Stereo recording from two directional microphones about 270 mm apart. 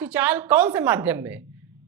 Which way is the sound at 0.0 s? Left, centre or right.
Centre.